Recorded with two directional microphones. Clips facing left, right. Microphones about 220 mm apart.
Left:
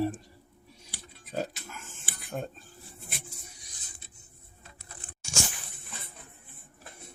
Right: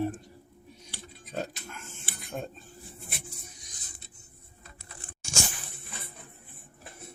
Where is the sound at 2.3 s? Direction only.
Centre (ahead or behind).